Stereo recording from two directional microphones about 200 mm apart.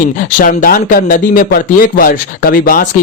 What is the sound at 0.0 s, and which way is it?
Speech, 40° left (ahead or behind).